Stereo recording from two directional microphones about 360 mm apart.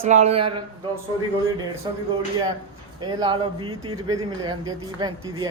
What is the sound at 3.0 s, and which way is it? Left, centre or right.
Speech, centre.